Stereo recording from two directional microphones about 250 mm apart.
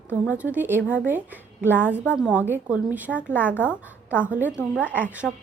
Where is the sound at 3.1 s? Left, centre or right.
Centre.